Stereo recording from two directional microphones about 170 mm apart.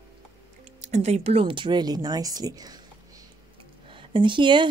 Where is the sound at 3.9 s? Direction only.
30° right (ahead or behind).